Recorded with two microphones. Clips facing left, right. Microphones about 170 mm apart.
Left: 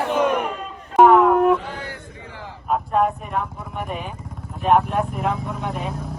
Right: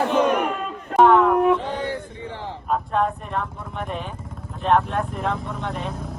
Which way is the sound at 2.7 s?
5° left (ahead or behind).